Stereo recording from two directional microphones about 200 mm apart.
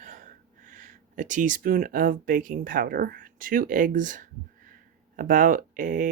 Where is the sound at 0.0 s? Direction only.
40° right (ahead or behind).